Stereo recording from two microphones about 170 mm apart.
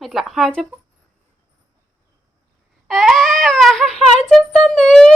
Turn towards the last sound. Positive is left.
turn(degrees=5)  # may be behind; listen again after turning